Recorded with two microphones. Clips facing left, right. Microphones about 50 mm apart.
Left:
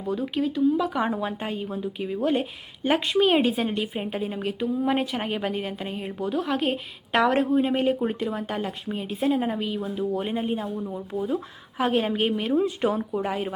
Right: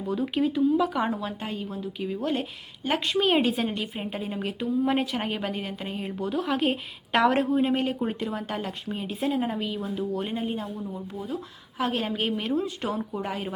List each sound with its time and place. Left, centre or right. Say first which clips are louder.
0.0 s a woman's voice: even; centre
1.2 s a woman's voice: left 3 dB; centre